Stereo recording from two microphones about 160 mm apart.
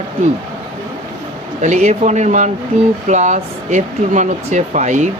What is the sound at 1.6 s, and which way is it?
Speech, 45° right (ahead or behind).